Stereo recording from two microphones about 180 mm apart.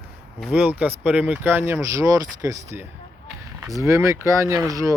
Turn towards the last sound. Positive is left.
turn(degrees=-20)  # may be behind; listen again after turning